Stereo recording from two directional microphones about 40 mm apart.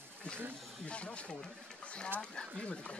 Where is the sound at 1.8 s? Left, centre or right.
Left.